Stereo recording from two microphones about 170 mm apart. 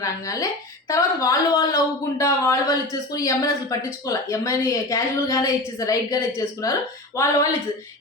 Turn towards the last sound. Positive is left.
turn(degrees=20)  # may be behind; listen again after turning